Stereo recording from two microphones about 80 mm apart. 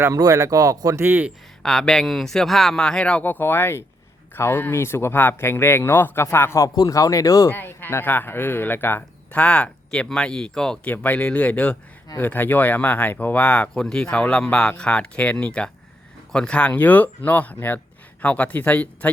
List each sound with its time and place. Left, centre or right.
0.1 s speech: right
1.0 s speech: right
1.6 s speech: centre; by 6.6 s left
6.7 s speech: left
7.5 s speech: left
9.3 s speech: centre
10.9 s speech: left